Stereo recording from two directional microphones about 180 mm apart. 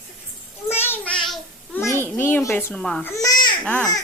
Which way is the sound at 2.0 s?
10° left (ahead or behind).